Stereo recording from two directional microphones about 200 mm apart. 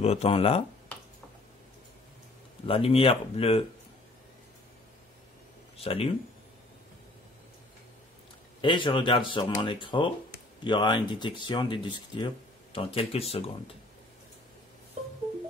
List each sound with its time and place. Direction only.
0.0 s speech: 30° left (ahead or behind)
2.6 s speech: 30° left (ahead or behind)
5.8 s speech: 30° left (ahead or behind)
8.5 s speech: 25° left (ahead or behind)